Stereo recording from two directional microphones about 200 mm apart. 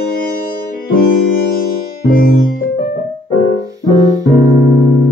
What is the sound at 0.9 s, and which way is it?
Music, 45° left (ahead or behind).